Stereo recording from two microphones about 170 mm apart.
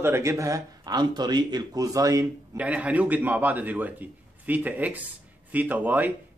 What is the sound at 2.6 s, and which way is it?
Speech, 10° right (ahead or behind).